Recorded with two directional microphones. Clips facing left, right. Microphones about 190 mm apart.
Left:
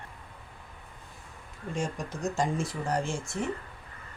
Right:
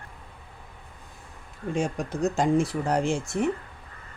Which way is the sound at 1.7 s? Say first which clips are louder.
Right 6 dB; 65° right (ahead or behind).